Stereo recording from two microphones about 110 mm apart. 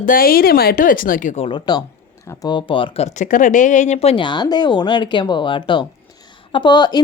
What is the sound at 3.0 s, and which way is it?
Speech, 90° left.